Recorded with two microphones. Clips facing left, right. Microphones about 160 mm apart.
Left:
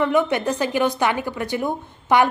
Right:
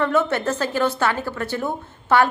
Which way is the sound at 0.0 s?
15° left (ahead or behind).